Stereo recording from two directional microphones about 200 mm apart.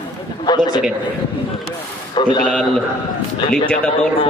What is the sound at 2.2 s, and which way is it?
Speech, 25° left (ahead or behind).